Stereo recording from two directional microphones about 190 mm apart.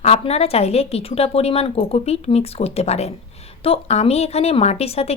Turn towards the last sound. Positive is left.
turn(degrees=35)  # may be behind; listen again after turning